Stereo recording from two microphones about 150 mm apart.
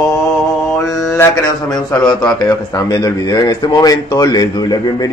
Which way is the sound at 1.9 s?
5° left (ahead or behind).